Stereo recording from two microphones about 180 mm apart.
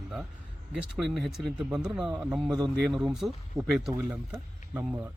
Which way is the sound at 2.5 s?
20° right (ahead or behind).